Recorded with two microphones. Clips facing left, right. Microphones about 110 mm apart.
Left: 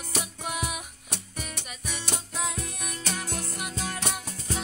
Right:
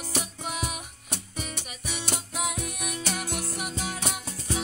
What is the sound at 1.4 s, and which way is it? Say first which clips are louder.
Music: right 2 dB; 5° right (ahead or behind).